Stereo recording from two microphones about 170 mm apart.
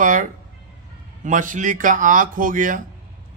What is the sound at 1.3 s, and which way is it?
A man's voice, 50° right (ahead or behind).